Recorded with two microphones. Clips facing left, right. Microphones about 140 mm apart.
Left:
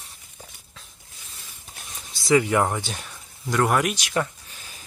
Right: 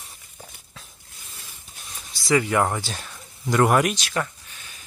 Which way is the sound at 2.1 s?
20° left (ahead or behind).